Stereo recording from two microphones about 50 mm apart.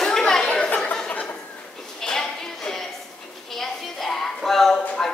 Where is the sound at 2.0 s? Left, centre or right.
Centre.